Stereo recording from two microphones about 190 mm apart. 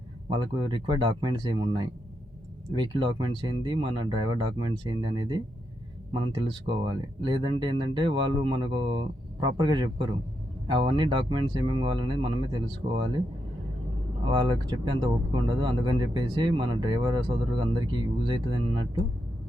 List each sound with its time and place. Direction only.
0.3 s speech: 25° right (ahead or behind)
14.3 s speech: 25° right (ahead or behind)